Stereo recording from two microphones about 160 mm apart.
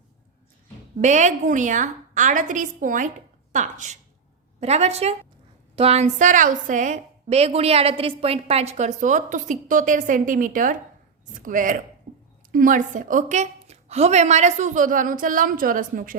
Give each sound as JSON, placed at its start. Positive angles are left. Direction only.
{"t": 0.9, "sound": "a woman's voice", "side_deg": -50}
{"t": 12.1, "sound": "a sound", "side_deg": -45}
{"t": 12.5, "sound": "a woman's voice", "side_deg": -60}